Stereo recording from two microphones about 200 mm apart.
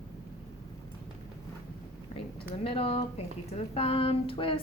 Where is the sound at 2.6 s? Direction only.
25° left (ahead or behind).